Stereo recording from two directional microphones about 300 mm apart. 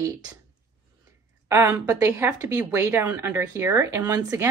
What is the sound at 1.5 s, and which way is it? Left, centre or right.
A woman's voice, centre.